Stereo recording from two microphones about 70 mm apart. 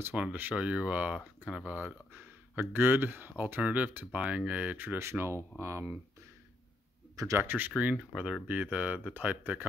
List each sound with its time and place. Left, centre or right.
0.1 s speech: centre
1.8 s a sound: right
2.7 s speech: right
4.7 s speech: right
7.3 s speech: right